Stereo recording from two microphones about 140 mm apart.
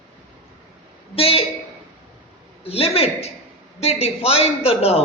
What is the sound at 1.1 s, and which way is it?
Speech, 45° left (ahead or behind).